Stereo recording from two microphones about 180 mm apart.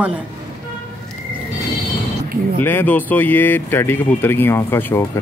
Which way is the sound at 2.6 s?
10° left (ahead or behind).